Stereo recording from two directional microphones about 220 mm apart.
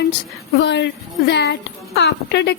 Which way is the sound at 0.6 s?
55° left (ahead or behind).